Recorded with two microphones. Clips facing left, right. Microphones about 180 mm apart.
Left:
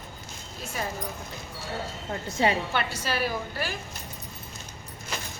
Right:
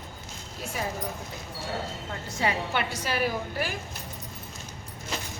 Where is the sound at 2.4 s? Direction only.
25° left (ahead or behind).